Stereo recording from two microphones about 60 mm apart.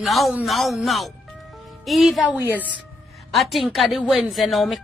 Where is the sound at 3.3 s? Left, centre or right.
Centre.